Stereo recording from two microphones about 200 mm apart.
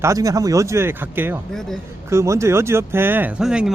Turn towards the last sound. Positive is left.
turn(degrees=-5)  # may be behind; listen again after turning